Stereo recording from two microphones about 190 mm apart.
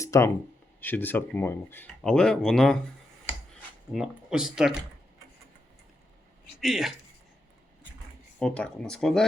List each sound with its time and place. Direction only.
0.0 s a sound: 15° left (ahead or behind)
0.8 s speech: 10° left (ahead or behind)
3.9 s speech: 5° right (ahead or behind)
6.6 s speech: centre (ahead or behind)
8.4 s speech: 5° left (ahead or behind)